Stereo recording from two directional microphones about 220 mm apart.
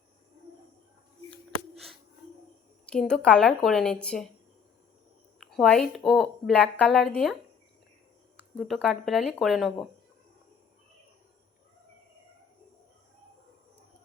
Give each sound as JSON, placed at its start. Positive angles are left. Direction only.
{"t": 1.7, "sound": "music", "side_deg": 0}
{"t": 2.8, "sound": "a woman's voice", "side_deg": 5}
{"t": 5.4, "sound": "a woman's voice", "side_deg": 0}
{"t": 8.5, "sound": "a woman's voice", "side_deg": 0}